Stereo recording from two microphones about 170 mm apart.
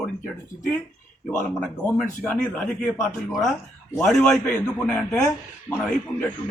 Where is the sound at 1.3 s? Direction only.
15° left (ahead or behind).